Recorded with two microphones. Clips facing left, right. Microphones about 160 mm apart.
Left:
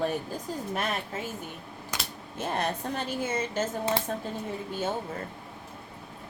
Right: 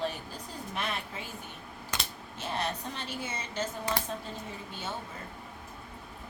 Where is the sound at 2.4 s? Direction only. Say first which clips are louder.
Left 4 dB; 50° left (ahead or behind).